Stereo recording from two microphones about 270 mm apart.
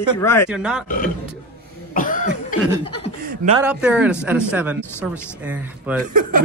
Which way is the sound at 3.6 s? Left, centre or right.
Centre.